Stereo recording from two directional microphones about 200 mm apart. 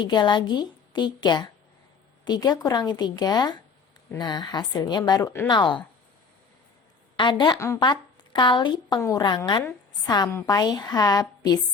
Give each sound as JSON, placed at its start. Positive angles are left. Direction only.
{"t": 0.0, "sound": "a woman's voice", "side_deg": 20}
{"t": 7.2, "sound": "a woman's voice", "side_deg": 20}